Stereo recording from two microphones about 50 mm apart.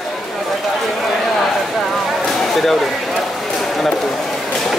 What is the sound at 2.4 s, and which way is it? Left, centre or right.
Speech, centre.